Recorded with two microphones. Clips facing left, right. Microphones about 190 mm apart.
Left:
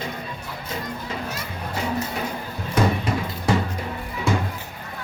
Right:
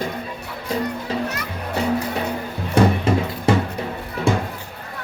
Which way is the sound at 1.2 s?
70° right (ahead or behind).